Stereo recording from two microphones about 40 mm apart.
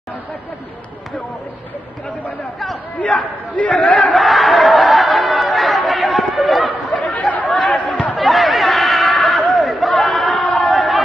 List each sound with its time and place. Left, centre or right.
3.0 s speech: left
4.1 s chatter: centre
6.9 s chatter: left
7.5 s chatter: centre
7.8 s chatter: left
8.2 s chatter: centre
9.4 s a sound: centre